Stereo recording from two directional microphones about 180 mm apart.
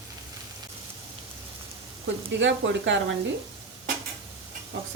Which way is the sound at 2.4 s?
90° right.